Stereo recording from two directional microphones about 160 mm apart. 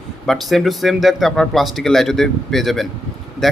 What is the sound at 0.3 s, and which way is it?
A man's voice, centre (ahead or behind).